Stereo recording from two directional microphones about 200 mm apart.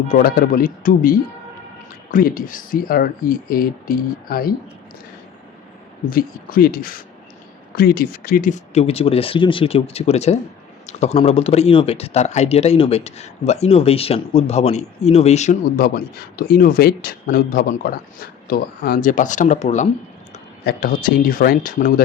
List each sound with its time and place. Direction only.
0.1 s speech: 50° left (ahead or behind)
6.1 s speech: 45° left (ahead or behind)
16.5 s speech: 50° left (ahead or behind)
20.7 s speech: 45° left (ahead or behind)